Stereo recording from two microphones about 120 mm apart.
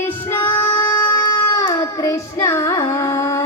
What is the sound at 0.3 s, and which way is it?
Female singing, 20° left (ahead or behind).